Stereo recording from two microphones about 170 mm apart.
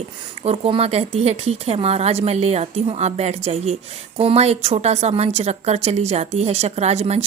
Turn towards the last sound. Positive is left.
turn(degrees=-40)  # may be behind; listen again after turning